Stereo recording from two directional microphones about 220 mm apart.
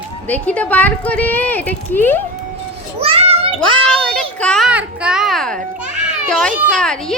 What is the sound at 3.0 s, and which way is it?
Children playing, 25° right (ahead or behind).